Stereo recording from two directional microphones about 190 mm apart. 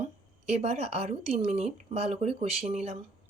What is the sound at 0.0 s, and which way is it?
Speech, 35° right (ahead or behind).